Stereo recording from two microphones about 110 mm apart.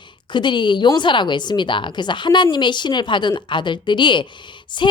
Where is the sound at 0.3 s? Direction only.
45° left (ahead or behind).